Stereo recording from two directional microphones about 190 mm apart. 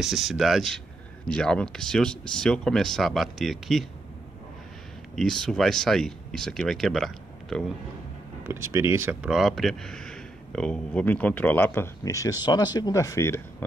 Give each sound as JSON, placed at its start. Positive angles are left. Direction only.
{"t": 0.0, "sound": "speech", "side_deg": 0}
{"t": 5.1, "sound": "speech", "side_deg": 0}
{"t": 8.5, "sound": "speech", "side_deg": -15}
{"t": 9.3, "sound": "speech", "side_deg": 0}